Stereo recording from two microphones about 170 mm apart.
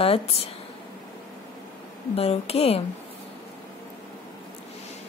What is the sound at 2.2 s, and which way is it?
Speech, 35° left (ahead or behind).